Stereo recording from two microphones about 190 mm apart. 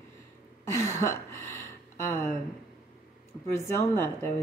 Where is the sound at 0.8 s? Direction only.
15° left (ahead or behind).